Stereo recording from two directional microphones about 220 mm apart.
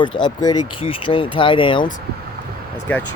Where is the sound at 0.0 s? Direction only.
20° left (ahead or behind).